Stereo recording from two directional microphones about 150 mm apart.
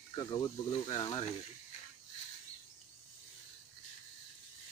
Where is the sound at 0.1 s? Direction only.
30° left (ahead or behind).